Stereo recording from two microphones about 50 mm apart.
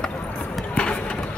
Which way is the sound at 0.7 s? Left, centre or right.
Left.